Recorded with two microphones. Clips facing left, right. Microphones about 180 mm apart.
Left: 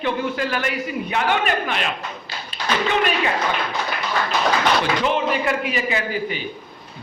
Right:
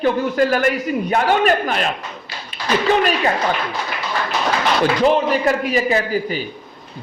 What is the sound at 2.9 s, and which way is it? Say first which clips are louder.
Speech: right 6 dB; 35° right (ahead or behind).